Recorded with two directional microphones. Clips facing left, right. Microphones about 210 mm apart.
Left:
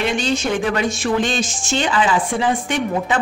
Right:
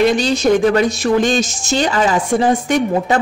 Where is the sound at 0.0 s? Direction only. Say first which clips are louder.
Right 6 dB; 35° right (ahead or behind).